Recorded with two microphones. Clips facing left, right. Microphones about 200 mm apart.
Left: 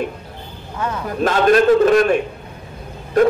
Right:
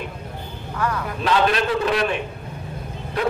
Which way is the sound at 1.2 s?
45° left (ahead or behind).